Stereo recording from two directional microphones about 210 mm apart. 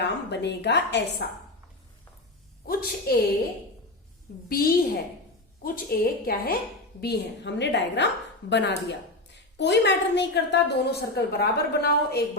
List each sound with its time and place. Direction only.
0.0 s a woman's voice: 55° left (ahead or behind)
2.6 s a woman's voice: 45° left (ahead or behind)
4.4 s a woman's voice: 45° left (ahead or behind)